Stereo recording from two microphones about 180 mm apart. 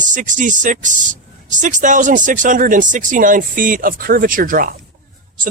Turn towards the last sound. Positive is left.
turn(degrees=-50)  # may be behind; listen again after turning